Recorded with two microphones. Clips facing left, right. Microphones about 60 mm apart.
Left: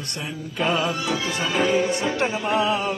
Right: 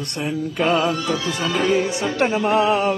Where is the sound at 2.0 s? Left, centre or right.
Right.